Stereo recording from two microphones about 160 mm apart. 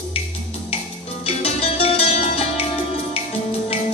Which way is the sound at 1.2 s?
40° left (ahead or behind).